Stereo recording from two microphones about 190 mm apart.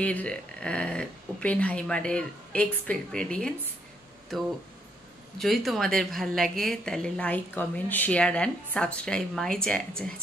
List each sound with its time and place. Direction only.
0.0 s a woman's voice: 5° left (ahead or behind)
5.4 s a woman's voice: centre (ahead or behind)